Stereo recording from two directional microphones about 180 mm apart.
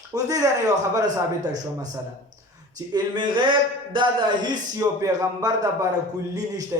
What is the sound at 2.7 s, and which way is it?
Speech, 25° right (ahead or behind).